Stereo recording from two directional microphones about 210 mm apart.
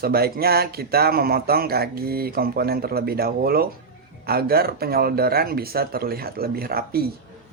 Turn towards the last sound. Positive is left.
turn(degrees=-45)  # may be behind; listen again after turning